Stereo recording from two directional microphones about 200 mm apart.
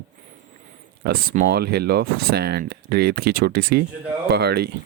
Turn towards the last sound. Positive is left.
turn(degrees=-55)  # may be behind; listen again after turning